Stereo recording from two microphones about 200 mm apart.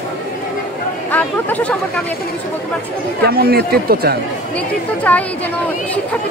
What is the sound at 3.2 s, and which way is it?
Speech, 50° right (ahead or behind).